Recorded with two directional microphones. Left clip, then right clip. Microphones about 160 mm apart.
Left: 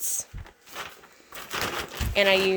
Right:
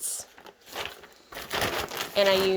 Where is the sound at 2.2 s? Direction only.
35° left (ahead or behind).